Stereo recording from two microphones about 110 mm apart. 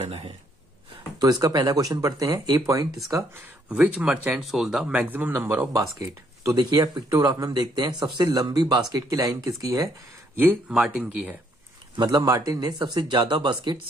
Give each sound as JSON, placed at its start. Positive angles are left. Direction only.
{"t": 1.2, "sound": "speech", "side_deg": -35}
{"t": 3.6, "sound": "speech", "side_deg": -10}
{"t": 5.9, "sound": "speech", "side_deg": -35}
{"t": 10.3, "sound": "speech", "side_deg": -20}
{"t": 10.7, "sound": "speech", "side_deg": -5}
{"t": 12.0, "sound": "speech", "side_deg": -35}